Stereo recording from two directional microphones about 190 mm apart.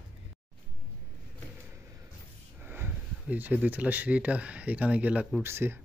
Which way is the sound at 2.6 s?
10° right (ahead or behind).